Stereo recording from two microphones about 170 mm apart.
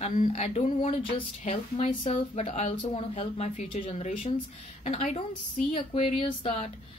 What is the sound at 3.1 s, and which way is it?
A woman's voice, 45° left (ahead or behind).